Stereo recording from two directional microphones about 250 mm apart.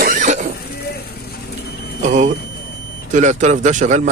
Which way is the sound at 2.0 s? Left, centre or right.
Right.